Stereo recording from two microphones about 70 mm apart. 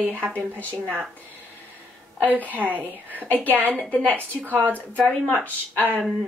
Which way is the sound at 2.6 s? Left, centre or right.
Right.